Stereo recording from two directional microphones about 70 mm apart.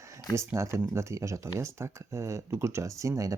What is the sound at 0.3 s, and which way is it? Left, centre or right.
Speech, right.